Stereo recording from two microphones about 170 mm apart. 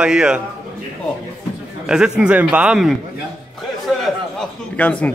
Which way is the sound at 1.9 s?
5° right (ahead or behind).